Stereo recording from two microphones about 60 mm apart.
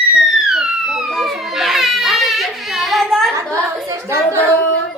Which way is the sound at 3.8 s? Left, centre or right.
Right.